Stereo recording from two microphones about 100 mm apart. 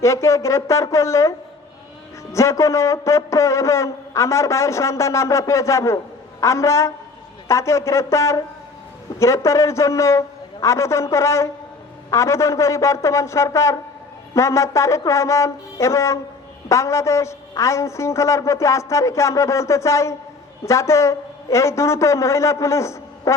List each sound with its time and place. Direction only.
0.0 s a man's voice: 30° left (ahead or behind)
2.3 s a man's voice: 30° left (ahead or behind)